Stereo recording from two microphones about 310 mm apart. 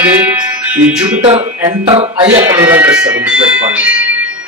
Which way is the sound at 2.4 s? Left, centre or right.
Centre.